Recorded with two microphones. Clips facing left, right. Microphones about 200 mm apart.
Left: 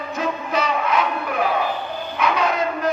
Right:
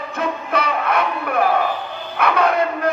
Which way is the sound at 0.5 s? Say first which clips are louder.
Right 1 dB; 60° right (ahead or behind).